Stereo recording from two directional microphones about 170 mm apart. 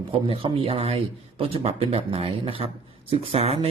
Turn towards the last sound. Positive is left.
turn(degrees=-35)  # may be behind; listen again after turning